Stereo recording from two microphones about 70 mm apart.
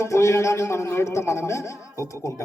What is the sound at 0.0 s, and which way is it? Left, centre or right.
A man's voice, left.